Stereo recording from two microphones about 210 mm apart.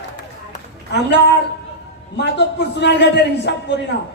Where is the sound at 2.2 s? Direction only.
55° left (ahead or behind).